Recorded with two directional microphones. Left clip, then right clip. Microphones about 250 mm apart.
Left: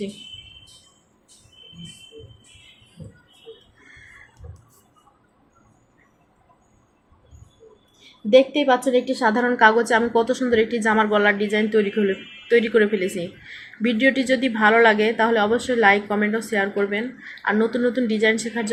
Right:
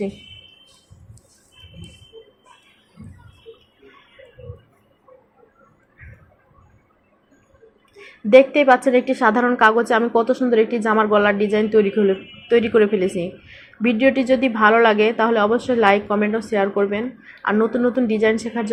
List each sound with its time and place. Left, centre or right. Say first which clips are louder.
8.3 s a woman's voice: right 4 dB; centre